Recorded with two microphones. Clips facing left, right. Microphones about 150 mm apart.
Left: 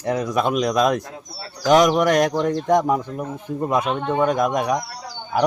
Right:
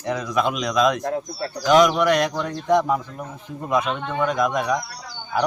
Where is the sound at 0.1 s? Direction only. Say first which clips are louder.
Left 2 dB; 45° left (ahead or behind).